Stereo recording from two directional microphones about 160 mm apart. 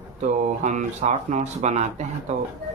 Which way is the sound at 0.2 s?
50° right (ahead or behind).